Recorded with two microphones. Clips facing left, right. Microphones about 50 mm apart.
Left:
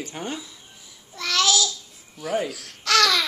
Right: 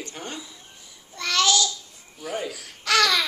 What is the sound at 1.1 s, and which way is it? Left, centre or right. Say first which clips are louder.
Babbling: even; centre.